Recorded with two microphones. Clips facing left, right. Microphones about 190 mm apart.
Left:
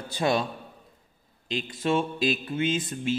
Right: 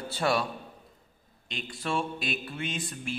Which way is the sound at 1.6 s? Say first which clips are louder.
Left 5 dB; 20° left (ahead or behind).